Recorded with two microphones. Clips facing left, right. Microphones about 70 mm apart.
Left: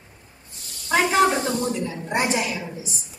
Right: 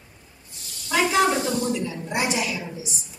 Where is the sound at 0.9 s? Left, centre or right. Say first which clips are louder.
Left 2 dB; left.